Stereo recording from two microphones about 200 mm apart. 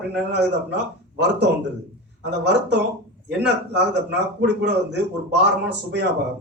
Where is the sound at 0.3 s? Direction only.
60° right (ahead or behind).